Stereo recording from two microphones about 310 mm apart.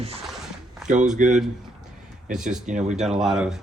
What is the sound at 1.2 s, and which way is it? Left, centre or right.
Speech, right.